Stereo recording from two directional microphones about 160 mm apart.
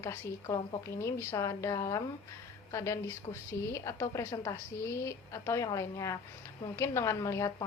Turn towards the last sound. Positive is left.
turn(degrees=20)  # may be behind; listen again after turning